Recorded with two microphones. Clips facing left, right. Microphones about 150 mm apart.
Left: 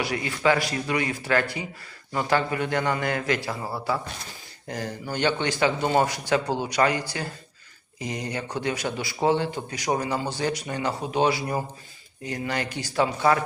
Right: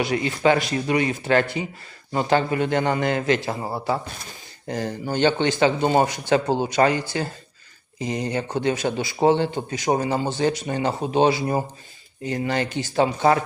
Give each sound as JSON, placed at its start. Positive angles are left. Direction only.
{"t": 0.0, "sound": "speech", "side_deg": -25}